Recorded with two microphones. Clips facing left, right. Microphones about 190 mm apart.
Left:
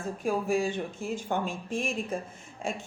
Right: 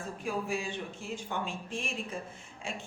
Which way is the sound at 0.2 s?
45° left (ahead or behind).